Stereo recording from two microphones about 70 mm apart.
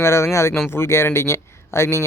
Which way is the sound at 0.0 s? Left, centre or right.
Left.